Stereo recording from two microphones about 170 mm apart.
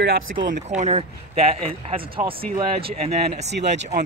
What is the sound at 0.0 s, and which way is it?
A man's voice, 65° right (ahead or behind).